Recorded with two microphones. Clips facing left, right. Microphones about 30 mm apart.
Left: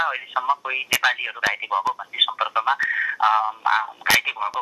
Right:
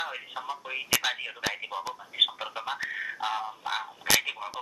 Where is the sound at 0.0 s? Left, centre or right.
Left.